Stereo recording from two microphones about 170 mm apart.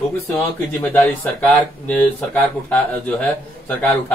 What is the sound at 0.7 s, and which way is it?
Speech, 10° left (ahead or behind).